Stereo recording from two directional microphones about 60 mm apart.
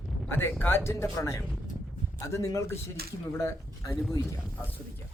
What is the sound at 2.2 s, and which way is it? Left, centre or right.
A man's voice, left.